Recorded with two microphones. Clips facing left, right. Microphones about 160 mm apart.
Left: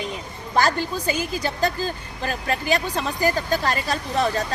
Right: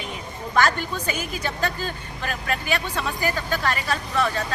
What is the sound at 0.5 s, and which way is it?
A woman's voice, 35° left (ahead or behind).